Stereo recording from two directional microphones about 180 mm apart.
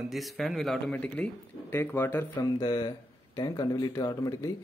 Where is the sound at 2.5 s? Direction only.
25° left (ahead or behind).